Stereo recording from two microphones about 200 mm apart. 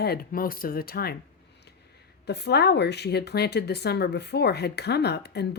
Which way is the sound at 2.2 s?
55° left (ahead or behind).